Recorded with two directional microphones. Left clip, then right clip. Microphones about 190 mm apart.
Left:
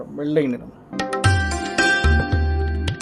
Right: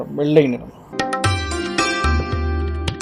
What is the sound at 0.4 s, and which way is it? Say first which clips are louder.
Music: right 3 dB; centre (ahead or behind).